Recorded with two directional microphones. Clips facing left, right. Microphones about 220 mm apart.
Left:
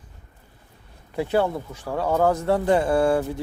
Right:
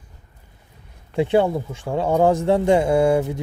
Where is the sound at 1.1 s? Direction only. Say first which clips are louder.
Right 4 dB; 25° right (ahead or behind).